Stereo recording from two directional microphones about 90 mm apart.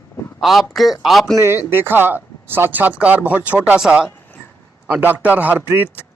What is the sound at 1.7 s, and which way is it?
Speech, 25° right (ahead or behind).